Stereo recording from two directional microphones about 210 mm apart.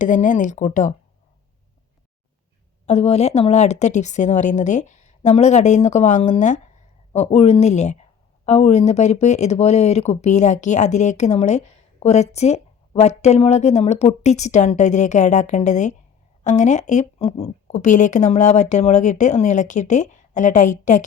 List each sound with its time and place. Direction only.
0.0 s speech: 35° left (ahead or behind)
2.8 s speech: 30° left (ahead or behind)